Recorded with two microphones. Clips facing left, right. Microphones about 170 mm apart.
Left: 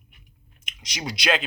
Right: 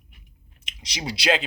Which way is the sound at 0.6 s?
30° right (ahead or behind).